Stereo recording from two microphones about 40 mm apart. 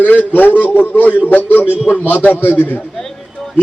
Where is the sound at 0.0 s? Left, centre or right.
Left.